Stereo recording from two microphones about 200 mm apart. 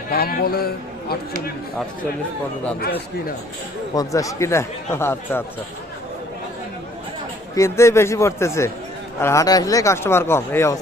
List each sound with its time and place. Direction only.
0.1 s a man's voice: 50° left (ahead or behind)
3.9 s speech: 15° left (ahead or behind)
7.5 s speech: 15° left (ahead or behind)